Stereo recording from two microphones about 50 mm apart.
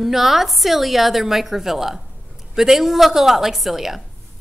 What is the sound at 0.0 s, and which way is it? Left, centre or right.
A woman's voice, centre.